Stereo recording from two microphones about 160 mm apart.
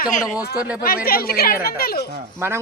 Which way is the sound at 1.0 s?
70° left (ahead or behind).